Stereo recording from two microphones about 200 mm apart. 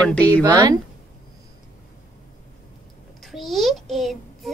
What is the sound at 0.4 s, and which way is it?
Speech, 20° right (ahead or behind).